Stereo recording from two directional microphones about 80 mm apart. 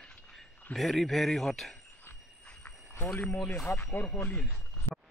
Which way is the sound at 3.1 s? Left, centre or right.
Centre.